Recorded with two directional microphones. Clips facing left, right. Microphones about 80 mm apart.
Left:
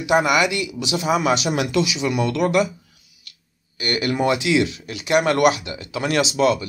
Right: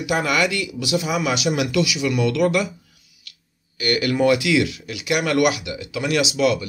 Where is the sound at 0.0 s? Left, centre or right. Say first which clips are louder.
Left 3 dB; left.